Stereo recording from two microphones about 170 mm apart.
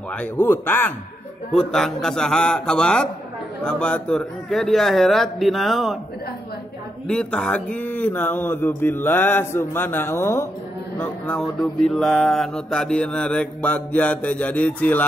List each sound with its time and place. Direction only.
0.1 s mantra: 10° left (ahead or behind)
1.5 s a man's voice: 5° left (ahead or behind)
7.1 s mantra: 5° left (ahead or behind)